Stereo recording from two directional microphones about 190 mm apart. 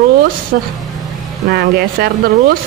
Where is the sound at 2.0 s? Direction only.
55° right (ahead or behind).